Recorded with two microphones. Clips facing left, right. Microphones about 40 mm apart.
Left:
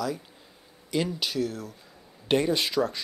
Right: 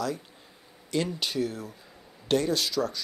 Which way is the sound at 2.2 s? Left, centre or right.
Left.